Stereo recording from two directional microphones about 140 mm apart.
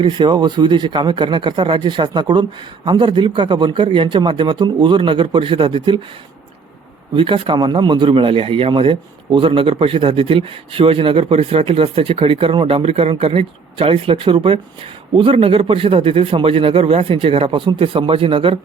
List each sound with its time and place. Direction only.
0.0 s speech: 35° right (ahead or behind)
7.1 s speech: 35° right (ahead or behind)